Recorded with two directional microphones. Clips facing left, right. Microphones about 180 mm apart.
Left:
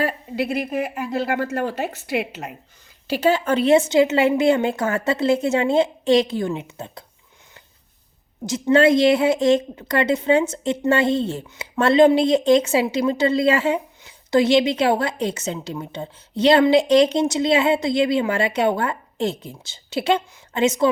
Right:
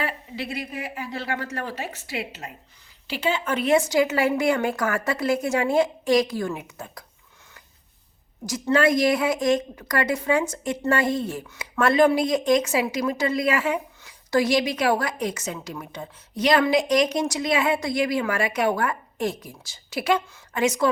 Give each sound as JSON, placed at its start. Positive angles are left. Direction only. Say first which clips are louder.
{"t": 1.2, "sound": "a woman's voice", "louder": "left 7 dB", "side_deg": 55}
{"t": 3.1, "sound": "a woman's voice", "louder": "left 7 dB", "side_deg": 40}
{"t": 8.4, "sound": "a woman's voice", "louder": "left 5 dB", "side_deg": 25}